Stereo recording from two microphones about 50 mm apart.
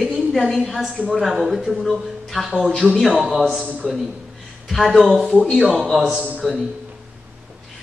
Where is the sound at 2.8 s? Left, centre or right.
Centre.